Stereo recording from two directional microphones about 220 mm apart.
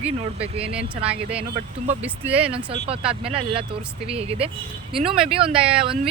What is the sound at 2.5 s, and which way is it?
Speech, 25° right (ahead or behind).